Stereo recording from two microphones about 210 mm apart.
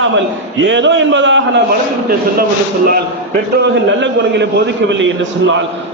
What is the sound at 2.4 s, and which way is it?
Speech, 45° right (ahead or behind).